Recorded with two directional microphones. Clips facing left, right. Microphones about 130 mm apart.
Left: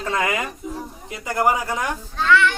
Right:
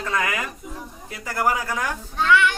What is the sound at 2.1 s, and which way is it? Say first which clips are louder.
Child singing: left 1 dB; 15° right (ahead or behind).